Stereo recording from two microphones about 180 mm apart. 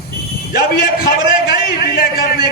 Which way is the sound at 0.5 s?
55° left (ahead or behind).